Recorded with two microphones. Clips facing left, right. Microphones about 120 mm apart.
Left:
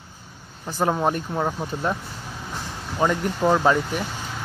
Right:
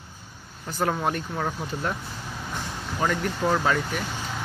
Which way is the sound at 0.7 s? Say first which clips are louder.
Left 4 dB; 30° left (ahead or behind).